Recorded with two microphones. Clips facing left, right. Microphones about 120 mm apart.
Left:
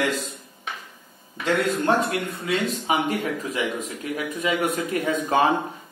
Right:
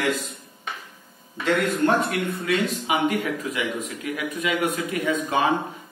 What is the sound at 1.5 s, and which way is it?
A man's voice, 25° left (ahead or behind).